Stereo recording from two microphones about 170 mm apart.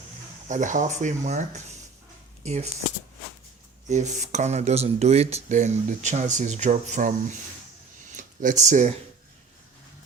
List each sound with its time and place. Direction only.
0.4 s speech: 50° right (ahead or behind)
3.8 s speech: 45° right (ahead or behind)
8.1 s speech: 50° right (ahead or behind)